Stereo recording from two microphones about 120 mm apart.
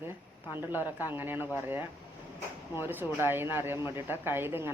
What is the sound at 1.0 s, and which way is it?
Speech, 15° right (ahead or behind).